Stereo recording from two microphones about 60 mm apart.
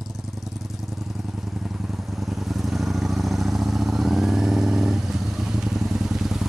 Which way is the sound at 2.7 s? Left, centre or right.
Centre.